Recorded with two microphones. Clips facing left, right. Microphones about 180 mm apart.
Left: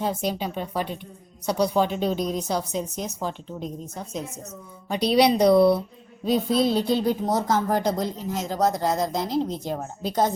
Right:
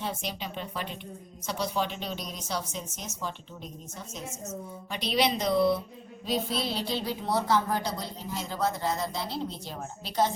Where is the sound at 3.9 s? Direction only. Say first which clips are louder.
Left 7 dB; 60° left (ahead or behind).